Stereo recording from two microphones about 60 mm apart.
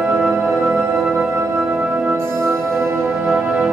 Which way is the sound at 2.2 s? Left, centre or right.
Right.